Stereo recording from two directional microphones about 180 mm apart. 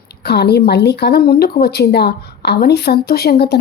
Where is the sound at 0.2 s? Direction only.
65° left (ahead or behind).